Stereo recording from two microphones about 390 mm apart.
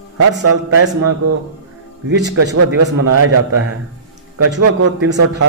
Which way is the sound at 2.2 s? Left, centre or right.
Right.